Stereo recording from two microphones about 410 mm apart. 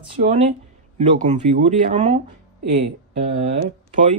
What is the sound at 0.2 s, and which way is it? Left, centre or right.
Speech, centre.